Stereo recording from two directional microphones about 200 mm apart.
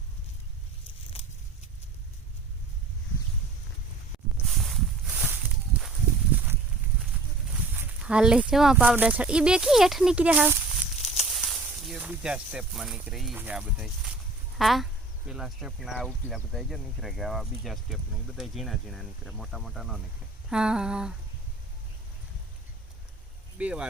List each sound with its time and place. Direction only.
1.1 s vehicle: 30° left (ahead or behind)
4.4 s walk: centre (ahead or behind)
5.1 s a sound: 10° right (ahead or behind)
7.7 s speech: 5° right (ahead or behind)
11.0 s a sound: 30° left (ahead or behind)
11.3 s speech: centre (ahead or behind)
23.6 s speech: 5° right (ahead or behind)